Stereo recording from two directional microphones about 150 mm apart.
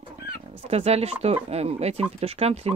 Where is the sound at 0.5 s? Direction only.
45° right (ahead or behind).